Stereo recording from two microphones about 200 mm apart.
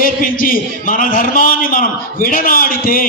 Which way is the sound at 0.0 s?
45° left (ahead or behind).